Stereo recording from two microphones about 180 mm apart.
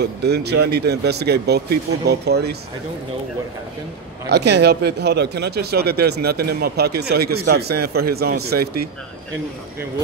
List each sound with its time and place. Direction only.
0.0 s speech: 65° right (ahead or behind)
4.3 s speech: 65° right (ahead or behind)